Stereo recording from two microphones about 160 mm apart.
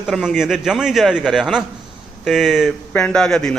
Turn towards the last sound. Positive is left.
turn(degrees=5)  # may be behind; listen again after turning